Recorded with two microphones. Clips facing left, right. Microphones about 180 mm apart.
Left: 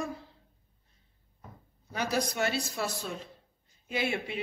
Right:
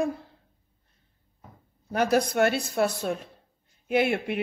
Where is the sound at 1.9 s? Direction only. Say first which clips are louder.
Right 8 dB; 55° right (ahead or behind).